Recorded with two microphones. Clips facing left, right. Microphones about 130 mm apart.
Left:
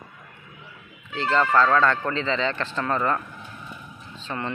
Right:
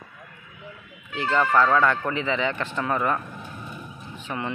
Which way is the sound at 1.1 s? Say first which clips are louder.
Even; 15° right (ahead or behind).